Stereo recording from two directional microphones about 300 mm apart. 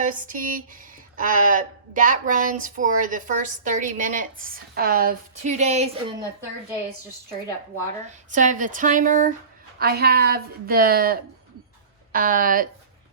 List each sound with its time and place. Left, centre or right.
0.0 s speech: right
8.3 s speech: right